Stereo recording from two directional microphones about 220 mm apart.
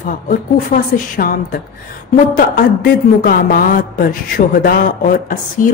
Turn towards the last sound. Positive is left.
turn(degrees=40)  # may be behind; listen again after turning